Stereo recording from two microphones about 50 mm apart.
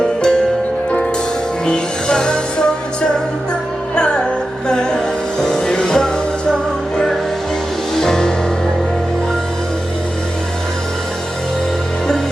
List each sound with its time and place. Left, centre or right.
0.0 s music: centre
1.6 s music: centre